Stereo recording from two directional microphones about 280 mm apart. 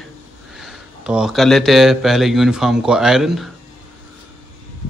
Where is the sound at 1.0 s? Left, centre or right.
Centre.